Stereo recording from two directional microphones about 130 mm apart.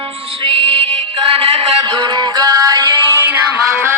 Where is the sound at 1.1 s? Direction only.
45° right (ahead or behind); by 3.2 s 30° right (ahead or behind).